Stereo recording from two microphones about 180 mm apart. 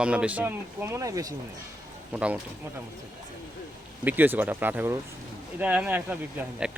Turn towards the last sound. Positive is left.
turn(degrees=-10)  # may be behind; listen again after turning